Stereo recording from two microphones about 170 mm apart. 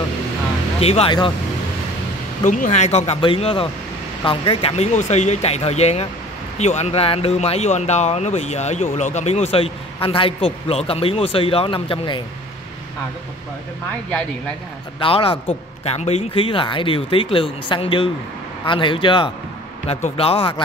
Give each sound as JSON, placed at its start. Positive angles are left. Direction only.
{"t": 0.7, "sound": "speech", "side_deg": 35}
{"t": 2.4, "sound": "speech", "side_deg": 45}
{"t": 15.0, "sound": "a man's voice", "side_deg": 30}